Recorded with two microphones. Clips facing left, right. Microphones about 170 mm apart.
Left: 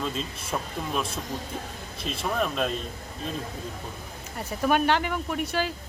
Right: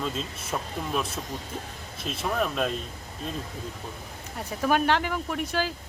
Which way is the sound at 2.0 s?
Centre (ahead or behind).